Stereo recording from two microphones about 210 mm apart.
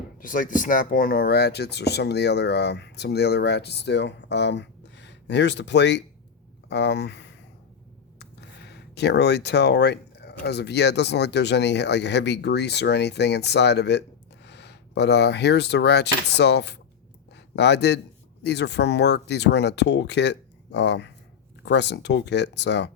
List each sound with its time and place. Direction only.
0.2 s speech: 40° left (ahead or behind)